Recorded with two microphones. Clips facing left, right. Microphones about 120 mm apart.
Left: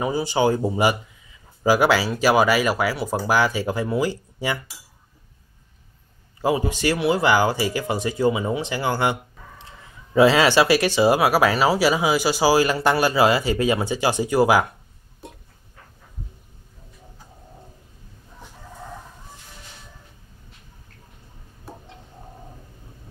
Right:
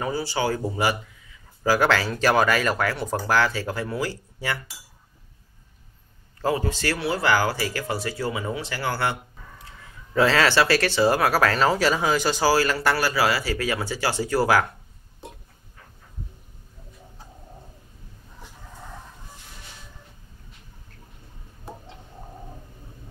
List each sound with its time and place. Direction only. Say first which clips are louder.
0.0 s speech: left 5 dB; 15° left (ahead or behind)
6.4 s speech: left 3 dB; 15° left (ahead or behind)